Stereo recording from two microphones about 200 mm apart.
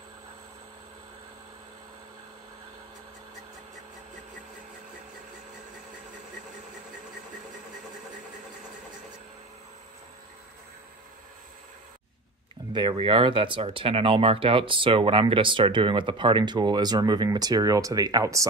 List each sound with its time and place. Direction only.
12.7 s speech: 25° right (ahead or behind)